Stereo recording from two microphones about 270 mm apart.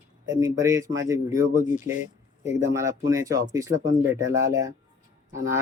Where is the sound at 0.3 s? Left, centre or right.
Centre.